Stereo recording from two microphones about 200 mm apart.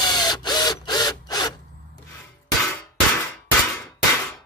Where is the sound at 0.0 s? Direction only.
20° left (ahead or behind).